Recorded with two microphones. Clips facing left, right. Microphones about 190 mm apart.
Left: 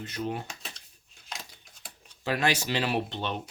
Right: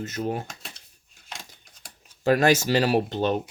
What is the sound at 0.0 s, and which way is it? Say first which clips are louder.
Speech: right 4 dB; 45° right (ahead or behind).